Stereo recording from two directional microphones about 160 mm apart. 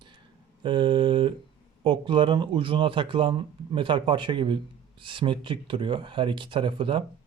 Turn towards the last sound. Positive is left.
turn(degrees=-30)  # may be behind; listen again after turning